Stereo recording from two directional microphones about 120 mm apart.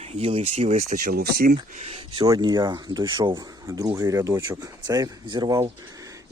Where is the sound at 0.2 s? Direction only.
60° right (ahead or behind).